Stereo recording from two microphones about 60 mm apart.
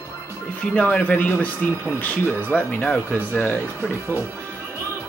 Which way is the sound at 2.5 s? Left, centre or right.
Left.